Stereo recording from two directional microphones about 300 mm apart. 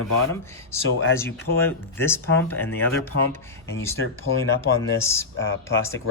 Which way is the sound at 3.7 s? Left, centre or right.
Left.